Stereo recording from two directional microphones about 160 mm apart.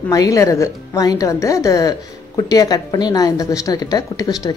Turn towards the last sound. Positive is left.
turn(degrees=25)  # may be behind; listen again after turning